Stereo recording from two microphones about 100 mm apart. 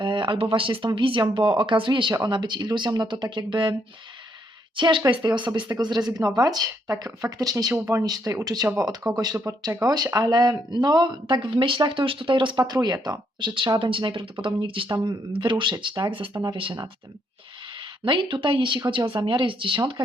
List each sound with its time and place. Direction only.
0.0 s a sound: 50° right (ahead or behind)
0.4 s speech: 60° right (ahead or behind)
4.8 s speech: 55° right (ahead or behind)
16.3 s speech: 40° right (ahead or behind)
18.0 s speech: 55° right (ahead or behind)